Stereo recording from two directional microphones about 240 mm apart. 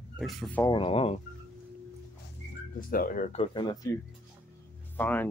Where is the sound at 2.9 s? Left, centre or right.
Left; by 3.9 s centre.